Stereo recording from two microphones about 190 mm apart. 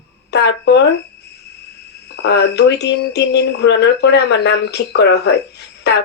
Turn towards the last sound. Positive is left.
turn(degrees=60)  # may be behind; listen again after turning